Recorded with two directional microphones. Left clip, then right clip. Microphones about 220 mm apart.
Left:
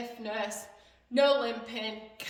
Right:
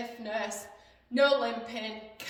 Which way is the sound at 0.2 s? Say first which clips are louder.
Even; 15° left (ahead or behind).